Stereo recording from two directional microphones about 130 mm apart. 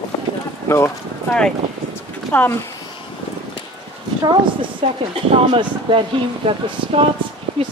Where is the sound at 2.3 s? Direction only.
15° left (ahead or behind).